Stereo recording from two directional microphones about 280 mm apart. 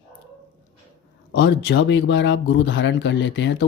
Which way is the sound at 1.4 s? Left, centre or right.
Left.